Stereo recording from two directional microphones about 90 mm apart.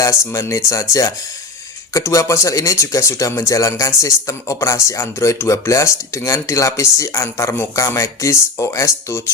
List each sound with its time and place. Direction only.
0.3 s speech: 35° left (ahead or behind)